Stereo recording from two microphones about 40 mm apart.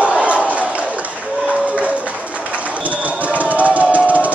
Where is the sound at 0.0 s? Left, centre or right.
Right.